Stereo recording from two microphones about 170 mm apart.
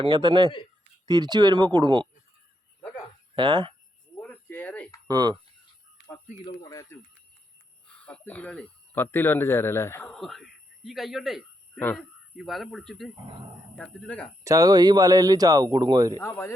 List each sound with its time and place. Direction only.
0.0 s speech: 25° right (ahead or behind)
3.3 s speech: 30° right (ahead or behind)
4.2 s a sound: 10° left (ahead or behind)
5.0 s speech: 25° right (ahead or behind)
6.7 s speech: 20° left (ahead or behind)
7.9 s speech: 5° left (ahead or behind)
10.1 s a sound: centre (ahead or behind)
11.8 s speech: 10° left (ahead or behind)
12.4 s speech: centre (ahead or behind)
14.1 s speech: 10° left (ahead or behind)
14.4 s speech: 20° right (ahead or behind)
16.1 s speech: 15° left (ahead or behind)